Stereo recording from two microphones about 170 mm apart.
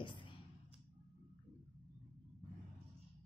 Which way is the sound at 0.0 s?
30° left (ahead or behind).